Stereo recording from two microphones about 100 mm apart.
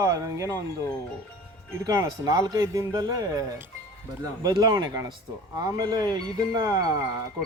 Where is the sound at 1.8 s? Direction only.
35° right (ahead or behind).